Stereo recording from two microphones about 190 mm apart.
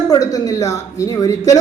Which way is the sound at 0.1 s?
20° left (ahead or behind).